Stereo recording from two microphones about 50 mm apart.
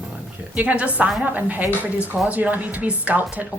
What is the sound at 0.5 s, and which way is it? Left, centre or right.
Speech, right.